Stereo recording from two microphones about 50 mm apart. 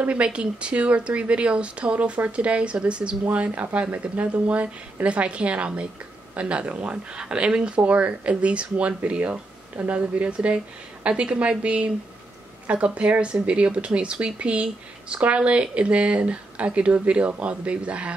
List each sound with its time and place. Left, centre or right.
0.0 s speech: right